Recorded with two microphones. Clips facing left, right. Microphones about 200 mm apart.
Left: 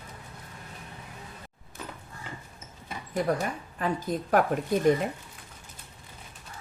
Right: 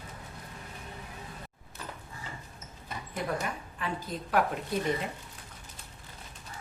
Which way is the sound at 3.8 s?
40° left (ahead or behind).